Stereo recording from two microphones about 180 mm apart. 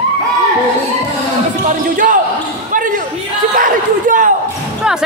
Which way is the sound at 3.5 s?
50° right (ahead or behind).